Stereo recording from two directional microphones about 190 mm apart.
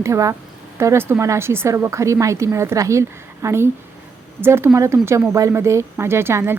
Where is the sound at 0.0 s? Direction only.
15° right (ahead or behind).